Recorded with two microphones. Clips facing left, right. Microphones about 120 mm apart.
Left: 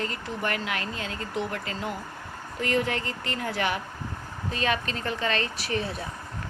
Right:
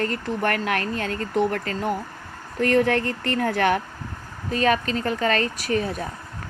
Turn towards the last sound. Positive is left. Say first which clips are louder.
# right 5 dB
turn(degrees=-45)  # may be behind; listen again after turning